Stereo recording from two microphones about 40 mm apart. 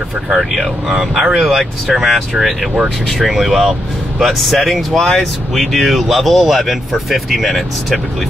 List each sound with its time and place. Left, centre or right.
0.4 s speech: centre